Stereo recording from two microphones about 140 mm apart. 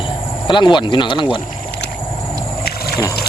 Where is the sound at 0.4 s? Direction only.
35° left (ahead or behind).